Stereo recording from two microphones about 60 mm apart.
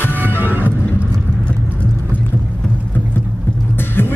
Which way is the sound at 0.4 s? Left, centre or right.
Right.